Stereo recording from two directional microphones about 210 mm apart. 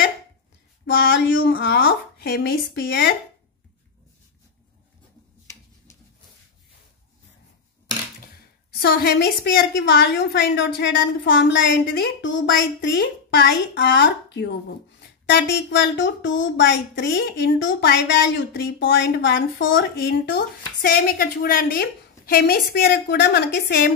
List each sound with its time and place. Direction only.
0.9 s speech: 55° left (ahead or behind)
8.8 s speech: 45° left (ahead or behind)